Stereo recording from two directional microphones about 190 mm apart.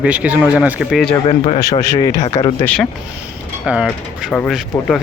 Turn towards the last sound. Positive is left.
turn(degrees=0)  # may be behind; listen again after turning